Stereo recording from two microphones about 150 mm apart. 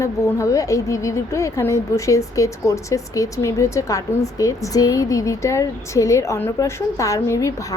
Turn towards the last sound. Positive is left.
turn(degrees=20)  # may be behind; listen again after turning